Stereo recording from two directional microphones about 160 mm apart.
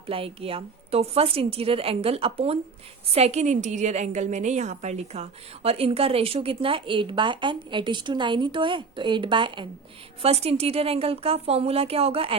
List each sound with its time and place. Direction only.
0.1 s a woman's voice: 35° right (ahead or behind)